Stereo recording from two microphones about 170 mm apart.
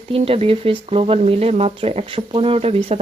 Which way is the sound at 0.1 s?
35° right (ahead or behind).